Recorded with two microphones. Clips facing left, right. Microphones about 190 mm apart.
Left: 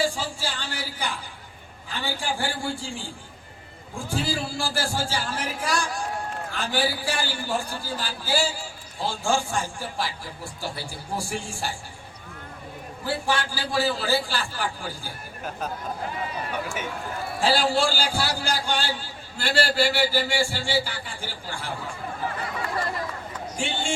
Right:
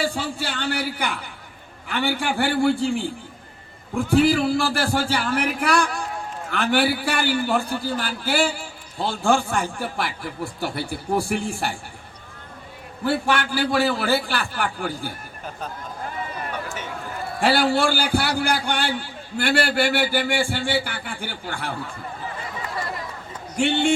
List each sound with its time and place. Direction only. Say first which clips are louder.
0.0 s a man's voice: right 1 dB; 60° right (ahead or behind)
13.1 s a man's voice: right 5 dB; 60° right (ahead or behind)
17.4 s a man's voice: right 3 dB; 65° right (ahead or behind)
23.6 s a man's voice: right 10 dB; 65° right (ahead or behind)